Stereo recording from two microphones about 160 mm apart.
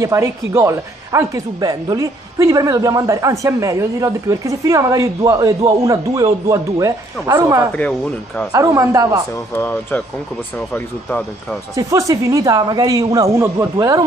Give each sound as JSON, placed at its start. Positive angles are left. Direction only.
{"t": 0.0, "sound": "speech", "side_deg": -20}
{"t": 7.7, "sound": "speech", "side_deg": 10}
{"t": 8.5, "sound": "speech", "side_deg": -20}
{"t": 9.6, "sound": "speech", "side_deg": 15}
{"t": 11.7, "sound": "speech", "side_deg": -20}